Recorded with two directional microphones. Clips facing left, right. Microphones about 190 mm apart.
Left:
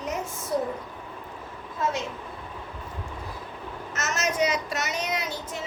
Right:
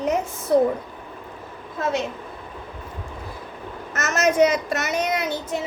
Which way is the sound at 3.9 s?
55° right (ahead or behind).